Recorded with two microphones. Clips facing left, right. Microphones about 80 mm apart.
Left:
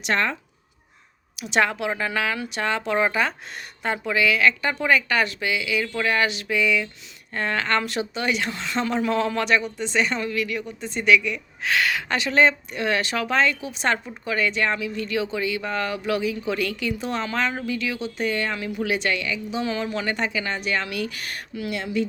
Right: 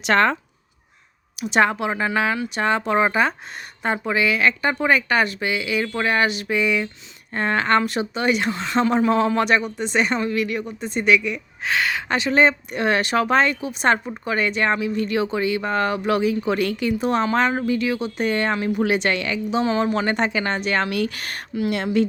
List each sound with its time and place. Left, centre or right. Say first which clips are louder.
0.0 s a woman's voice: right 6 dB; right
1.5 s speech: right 3 dB; right
7.3 s speech: right 4 dB; right
7.9 s speech: right 4 dB; right
9.0 s speech: right 4 dB; right
9.6 s a woman's voice: right 2 dB; right
10.1 s speech: right 4 dB; centre
10.3 s speech: right 3 dB; right
10.7 s a woman's voice: even; right
11.7 s a woman's voice: right 1 dB; right
17.5 s speech: right 6 dB; right
18.0 s a woman's voice: right 4 dB; right
19.6 s speech: right 5 dB; right
20.1 s a woman's voice: right 4 dB; right